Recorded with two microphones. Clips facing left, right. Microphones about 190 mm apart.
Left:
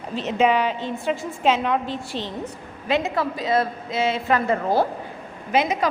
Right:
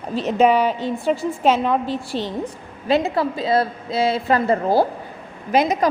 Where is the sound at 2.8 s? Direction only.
35° right (ahead or behind).